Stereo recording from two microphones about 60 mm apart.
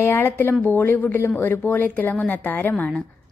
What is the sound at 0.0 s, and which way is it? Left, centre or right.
Speech, left.